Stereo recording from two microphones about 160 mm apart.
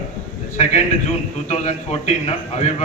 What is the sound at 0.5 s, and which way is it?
A man's voice, 45° left (ahead or behind).